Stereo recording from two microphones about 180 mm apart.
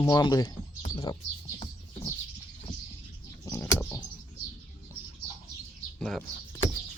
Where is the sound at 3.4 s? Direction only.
15° left (ahead or behind).